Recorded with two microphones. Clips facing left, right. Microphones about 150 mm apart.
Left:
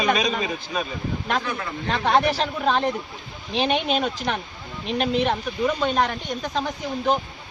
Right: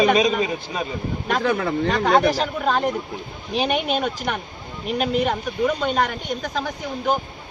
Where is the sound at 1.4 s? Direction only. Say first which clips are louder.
Right 8 dB; 70° right (ahead or behind).